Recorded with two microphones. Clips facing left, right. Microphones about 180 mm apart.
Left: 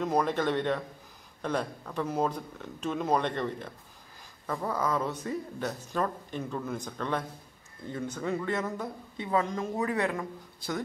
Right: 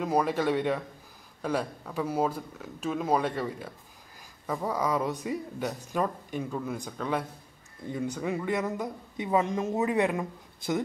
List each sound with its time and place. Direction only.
0.0 s speech: 10° right (ahead or behind)